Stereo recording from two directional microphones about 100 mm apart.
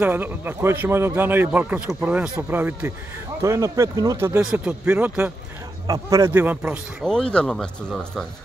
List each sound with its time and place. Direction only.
0.0 s speech: 20° right (ahead or behind)
3.4 s speech: 30° right (ahead or behind)
4.4 s speech: 10° right (ahead or behind)
5.9 s speech: 35° right (ahead or behind)
6.3 s speech: 20° right (ahead or behind)
7.1 s speech: 10° left (ahead or behind)